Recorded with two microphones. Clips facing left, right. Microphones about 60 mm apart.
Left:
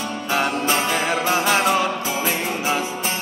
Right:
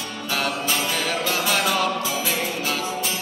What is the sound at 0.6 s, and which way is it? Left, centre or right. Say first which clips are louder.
Music: left 4 dB; left.